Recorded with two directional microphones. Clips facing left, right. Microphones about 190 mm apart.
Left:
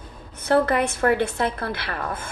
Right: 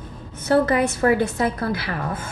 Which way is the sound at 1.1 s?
15° right (ahead or behind).